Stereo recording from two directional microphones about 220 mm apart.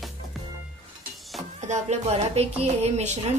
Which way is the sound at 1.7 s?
30° right (ahead or behind).